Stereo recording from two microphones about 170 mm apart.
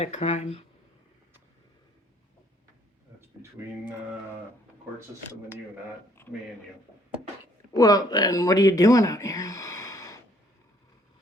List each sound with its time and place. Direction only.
0.0 s speech: 40° left (ahead or behind)
7.8 s speech: 20° left (ahead or behind)